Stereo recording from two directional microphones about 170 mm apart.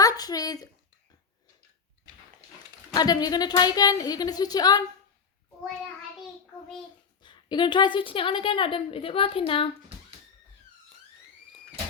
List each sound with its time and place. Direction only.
0.0 s speech: 20° left (ahead or behind)
2.9 s a woman's voice: 20° left (ahead or behind)
7.2 s a woman's voice: 25° left (ahead or behind)